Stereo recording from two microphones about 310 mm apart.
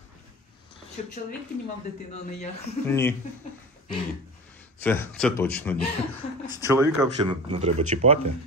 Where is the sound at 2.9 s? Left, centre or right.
Centre.